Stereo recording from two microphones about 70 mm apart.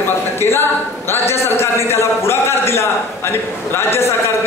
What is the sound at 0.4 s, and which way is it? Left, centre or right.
A woman's voice, left.